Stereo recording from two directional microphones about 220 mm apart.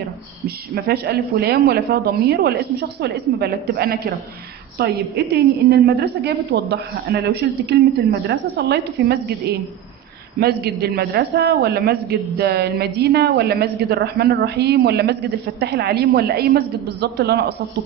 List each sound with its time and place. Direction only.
0.8 s a woman's voice: 45° right (ahead or behind)